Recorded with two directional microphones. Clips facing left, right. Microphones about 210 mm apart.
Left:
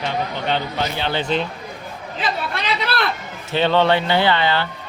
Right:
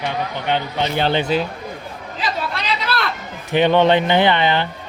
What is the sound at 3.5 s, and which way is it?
Speech, 15° right (ahead or behind).